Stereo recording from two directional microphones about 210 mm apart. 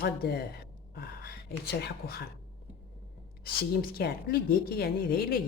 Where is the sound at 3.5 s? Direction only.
45° left (ahead or behind).